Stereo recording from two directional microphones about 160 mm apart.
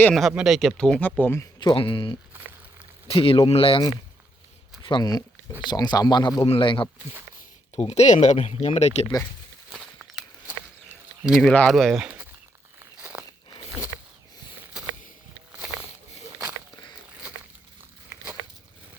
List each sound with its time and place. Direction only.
0.1 s speech: centre (ahead or behind)
1.5 s speech: 30° left (ahead or behind)
4.8 s a sound: 30° left (ahead or behind)
5.6 s speech: 25° left (ahead or behind)
7.8 s speech: 45° left (ahead or behind)
10.4 s a sound: 10° right (ahead or behind)
11.5 s speech: 5° left (ahead or behind)
13.0 s walk: 10° right (ahead or behind)
15.5 s a sound: 10° right (ahead or behind)